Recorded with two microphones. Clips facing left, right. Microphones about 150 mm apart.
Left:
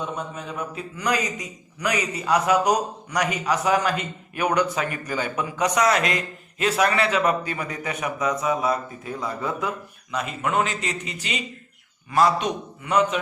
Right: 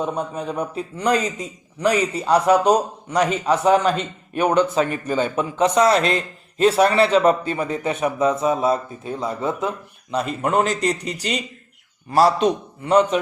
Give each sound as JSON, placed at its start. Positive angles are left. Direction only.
{"t": 0.0, "sound": "a man's voice", "side_deg": -35}